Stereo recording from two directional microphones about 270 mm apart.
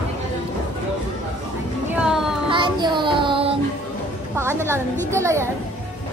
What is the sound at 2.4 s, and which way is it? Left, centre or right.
Child singing, centre.